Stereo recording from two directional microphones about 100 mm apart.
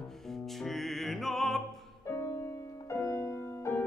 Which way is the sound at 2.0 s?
25° left (ahead or behind).